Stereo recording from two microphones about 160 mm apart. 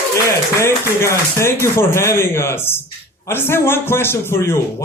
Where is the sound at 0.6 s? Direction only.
15° left (ahead or behind).